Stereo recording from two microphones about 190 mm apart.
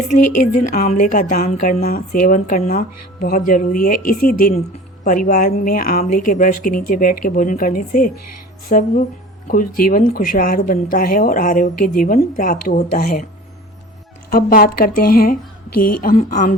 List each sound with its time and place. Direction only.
0.1 s a woman's voice: 45° left (ahead or behind)
14.3 s a woman's voice: 50° left (ahead or behind)